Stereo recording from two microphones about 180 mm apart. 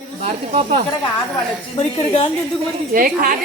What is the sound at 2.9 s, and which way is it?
Speech, 55° right (ahead or behind).